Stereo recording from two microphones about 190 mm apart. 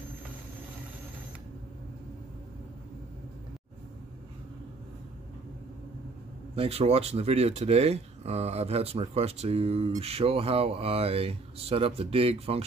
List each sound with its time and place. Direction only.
6.5 s speech: 30° right (ahead or behind)